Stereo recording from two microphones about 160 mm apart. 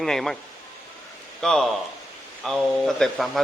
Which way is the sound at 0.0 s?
Centre (ahead or behind).